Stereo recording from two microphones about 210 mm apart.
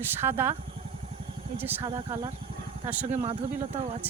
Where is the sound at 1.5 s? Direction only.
10° right (ahead or behind).